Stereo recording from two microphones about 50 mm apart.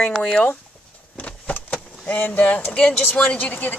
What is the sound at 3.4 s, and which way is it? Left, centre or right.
Speech, left.